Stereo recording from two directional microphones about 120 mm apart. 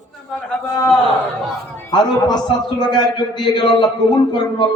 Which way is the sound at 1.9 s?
35° left (ahead or behind).